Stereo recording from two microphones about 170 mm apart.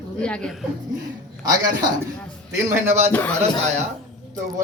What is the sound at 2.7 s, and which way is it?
Speech, 15° right (ahead or behind).